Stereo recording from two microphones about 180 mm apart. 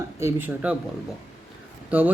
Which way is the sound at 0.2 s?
15° right (ahead or behind).